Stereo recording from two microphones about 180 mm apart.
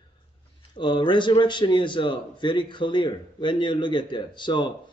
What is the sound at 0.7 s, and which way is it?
A man's voice, 25° left (ahead or behind).